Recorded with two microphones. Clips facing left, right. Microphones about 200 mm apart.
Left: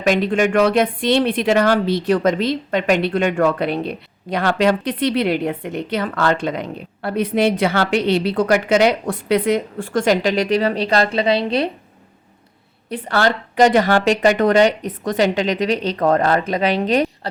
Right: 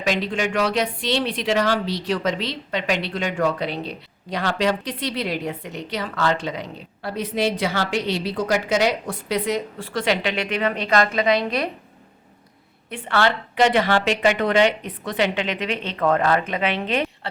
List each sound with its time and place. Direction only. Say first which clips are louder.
0.0 s speech: left 7 dB; 50° left (ahead or behind); by 11.7 s 30° left (ahead or behind)
12.9 s speech: left 3 dB; 40° left (ahead or behind)